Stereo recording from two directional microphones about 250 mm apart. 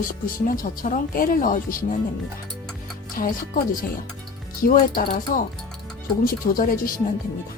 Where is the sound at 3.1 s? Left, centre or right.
Left.